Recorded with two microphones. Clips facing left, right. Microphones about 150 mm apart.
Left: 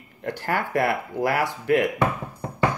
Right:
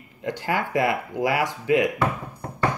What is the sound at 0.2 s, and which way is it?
Speech, 15° right (ahead or behind).